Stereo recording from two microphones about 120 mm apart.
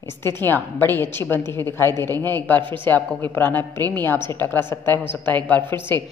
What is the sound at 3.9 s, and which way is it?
A woman's voice, 15° left (ahead or behind).